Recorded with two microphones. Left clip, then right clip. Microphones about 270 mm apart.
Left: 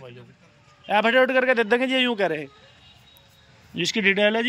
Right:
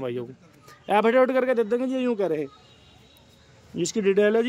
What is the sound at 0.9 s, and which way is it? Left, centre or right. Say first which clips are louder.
Speech: left 1 dB; centre.